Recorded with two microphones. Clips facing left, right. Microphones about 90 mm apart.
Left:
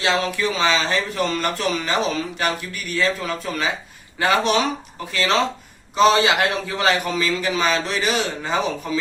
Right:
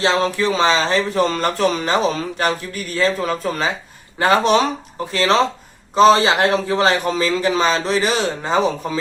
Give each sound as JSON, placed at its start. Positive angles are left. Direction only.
{"t": 0.0, "sound": "speech", "side_deg": -35}